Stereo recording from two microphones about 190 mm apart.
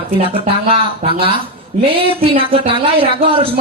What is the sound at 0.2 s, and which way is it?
Speech, 30° right (ahead or behind).